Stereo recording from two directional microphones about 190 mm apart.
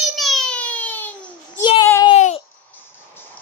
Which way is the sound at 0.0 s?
Centre (ahead or behind).